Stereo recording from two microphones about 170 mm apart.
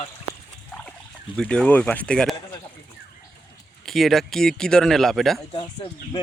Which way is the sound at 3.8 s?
Centre (ahead or behind).